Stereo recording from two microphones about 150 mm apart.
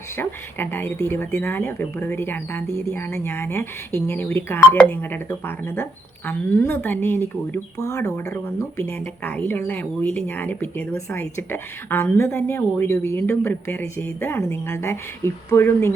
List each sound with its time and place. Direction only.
0.2 s speech: 15° left (ahead or behind)